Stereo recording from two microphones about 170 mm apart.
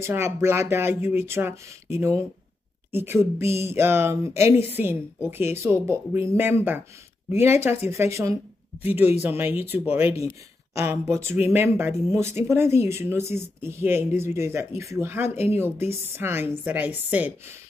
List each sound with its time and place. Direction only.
0.0 s speech: 15° right (ahead or behind)